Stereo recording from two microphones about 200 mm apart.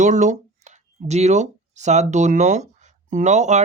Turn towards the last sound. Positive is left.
turn(degrees=-35)  # may be behind; listen again after turning